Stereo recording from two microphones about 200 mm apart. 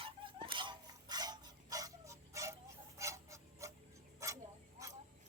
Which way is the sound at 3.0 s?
15° right (ahead or behind).